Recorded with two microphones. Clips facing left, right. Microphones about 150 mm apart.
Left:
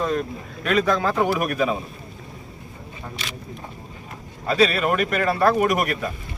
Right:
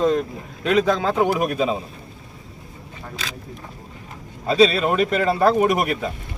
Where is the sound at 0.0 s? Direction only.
20° right (ahead or behind).